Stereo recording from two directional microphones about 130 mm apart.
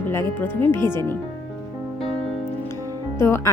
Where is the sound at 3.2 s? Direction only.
20° left (ahead or behind).